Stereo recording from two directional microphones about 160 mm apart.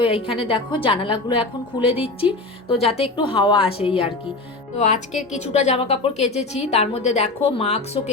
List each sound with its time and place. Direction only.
0.0 s a woman's voice: 35° left (ahead or behind)
2.2 s a woman's voice: 35° left (ahead or behind)
4.8 s a woman's voice: 45° left (ahead or behind)